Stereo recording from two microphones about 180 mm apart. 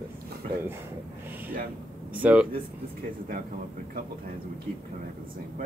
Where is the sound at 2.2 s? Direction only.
10° right (ahead or behind).